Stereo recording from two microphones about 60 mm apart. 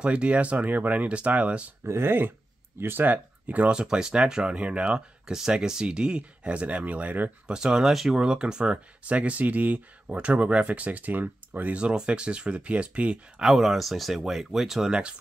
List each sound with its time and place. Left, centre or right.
0.0 s speech: centre
1.8 s speech: right
7.5 s speech: centre; by 11.7 s right
11.7 s speech: centre
13.4 s speech: centre